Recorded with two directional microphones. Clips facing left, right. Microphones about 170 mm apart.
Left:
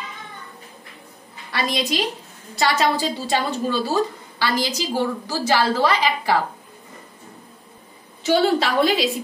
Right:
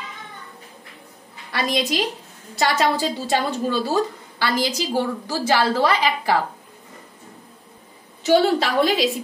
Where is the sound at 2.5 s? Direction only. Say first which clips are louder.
Even; 50° right (ahead or behind).